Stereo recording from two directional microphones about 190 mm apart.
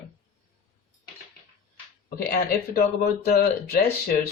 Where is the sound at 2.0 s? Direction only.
50° left (ahead or behind).